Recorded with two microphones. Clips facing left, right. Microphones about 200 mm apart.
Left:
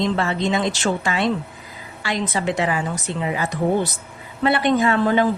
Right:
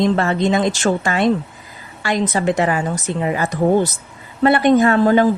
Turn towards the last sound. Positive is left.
turn(degrees=-45)  # may be behind; listen again after turning